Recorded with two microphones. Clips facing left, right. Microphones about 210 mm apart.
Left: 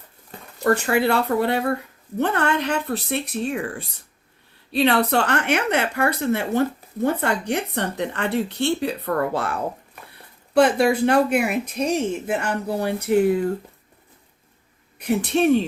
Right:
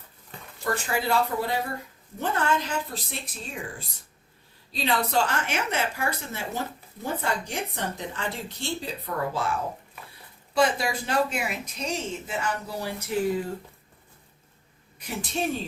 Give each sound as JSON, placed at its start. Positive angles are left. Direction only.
{"t": 0.6, "sound": "a woman's voice", "side_deg": 65}
{"t": 14.9, "sound": "a woman's voice", "side_deg": 65}